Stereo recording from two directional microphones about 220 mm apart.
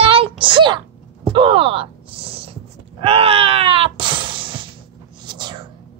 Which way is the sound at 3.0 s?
25° right (ahead or behind).